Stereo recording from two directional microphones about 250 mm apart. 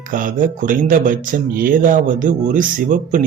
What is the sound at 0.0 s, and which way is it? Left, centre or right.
Speech, right.